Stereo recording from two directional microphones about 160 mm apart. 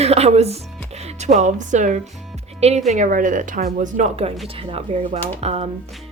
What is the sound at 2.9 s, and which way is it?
A woman's voice, 55° right (ahead or behind).